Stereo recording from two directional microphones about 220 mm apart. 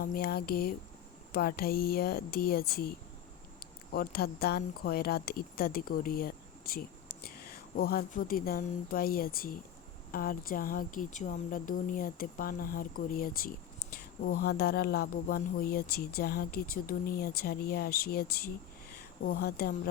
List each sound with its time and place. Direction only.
0.0 s speech: 45° left (ahead or behind)
3.9 s speech: 45° left (ahead or behind)